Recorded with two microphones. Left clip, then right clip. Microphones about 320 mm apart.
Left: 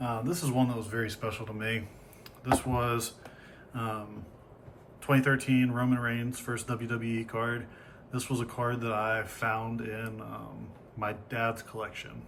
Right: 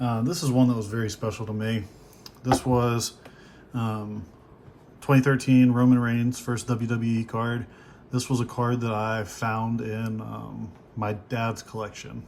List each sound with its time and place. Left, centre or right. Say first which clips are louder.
0.0 s a sound: right 5 dB; centre
0.6 s speech: right 5 dB; centre
5.1 s speech: right 5 dB; centre